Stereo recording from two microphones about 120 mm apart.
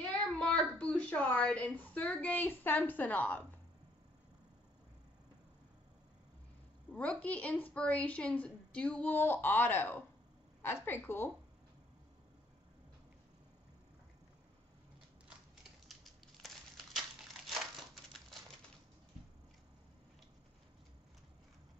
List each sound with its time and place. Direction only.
0.4 s a woman's voice: 10° left (ahead or behind)
6.9 s a woman's voice: 10° left (ahead or behind)
16.0 s crushing: centre (ahead or behind)